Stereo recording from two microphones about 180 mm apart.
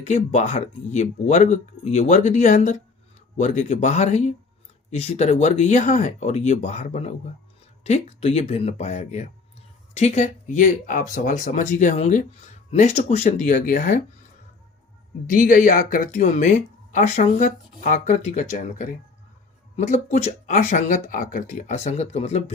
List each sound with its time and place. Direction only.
0.0 s speech: 40° left (ahead or behind)
15.3 s speech: 45° left (ahead or behind)